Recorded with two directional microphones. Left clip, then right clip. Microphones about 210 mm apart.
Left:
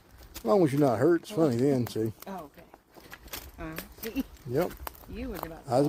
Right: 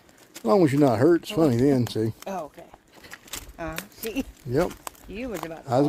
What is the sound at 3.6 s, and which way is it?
Speech, 55° right (ahead or behind).